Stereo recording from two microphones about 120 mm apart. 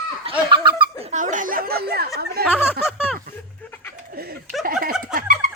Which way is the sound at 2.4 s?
15° left (ahead or behind).